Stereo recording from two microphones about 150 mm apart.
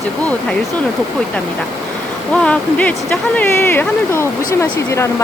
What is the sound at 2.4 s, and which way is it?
Speech, 10° left (ahead or behind).